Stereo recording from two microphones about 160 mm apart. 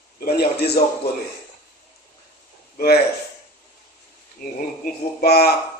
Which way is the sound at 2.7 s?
80° left.